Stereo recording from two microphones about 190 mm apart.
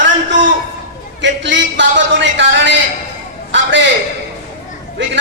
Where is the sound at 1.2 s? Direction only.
70° right (ahead or behind).